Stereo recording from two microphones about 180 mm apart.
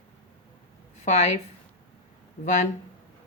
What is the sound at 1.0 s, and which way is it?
Speech, 40° left (ahead or behind).